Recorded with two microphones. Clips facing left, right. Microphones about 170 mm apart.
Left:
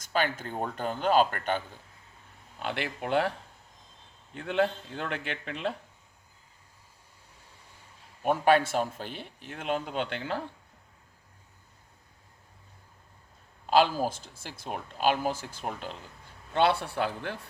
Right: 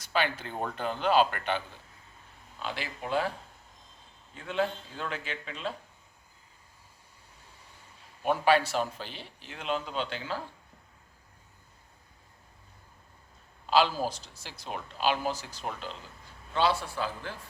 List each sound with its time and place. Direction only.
0.0 s speech: 45° left (ahead or behind)
2.6 s speech: 60° left (ahead or behind)
4.4 s speech: 60° left (ahead or behind)
8.2 s speech: 50° left (ahead or behind)
13.7 s speech: 50° left (ahead or behind)